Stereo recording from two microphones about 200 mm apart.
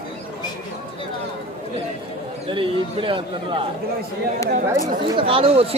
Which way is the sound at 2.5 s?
25° right (ahead or behind).